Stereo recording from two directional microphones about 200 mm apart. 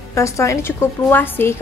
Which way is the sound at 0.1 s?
15° left (ahead or behind).